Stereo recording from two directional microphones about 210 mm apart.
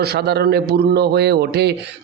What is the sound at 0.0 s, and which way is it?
A man's voice, 50° right (ahead or behind).